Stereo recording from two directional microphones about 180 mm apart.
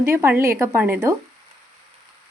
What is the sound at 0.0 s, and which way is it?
A woman's voice, 15° right (ahead or behind).